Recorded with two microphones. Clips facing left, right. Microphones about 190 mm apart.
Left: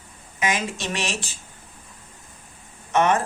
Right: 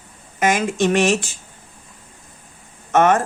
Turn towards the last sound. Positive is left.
turn(degrees=-50)  # may be behind; listen again after turning